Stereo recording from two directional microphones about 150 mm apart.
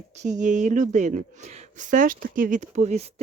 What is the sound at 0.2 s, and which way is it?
Speech, 55° right (ahead or behind).